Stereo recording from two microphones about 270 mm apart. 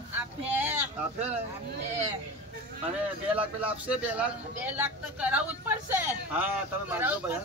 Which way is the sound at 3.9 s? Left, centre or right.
Centre.